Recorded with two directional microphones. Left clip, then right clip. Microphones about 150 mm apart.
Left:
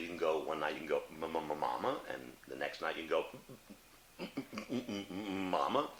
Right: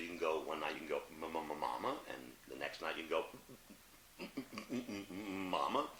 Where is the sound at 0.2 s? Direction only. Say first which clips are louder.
Left 4 dB; 45° right (ahead or behind).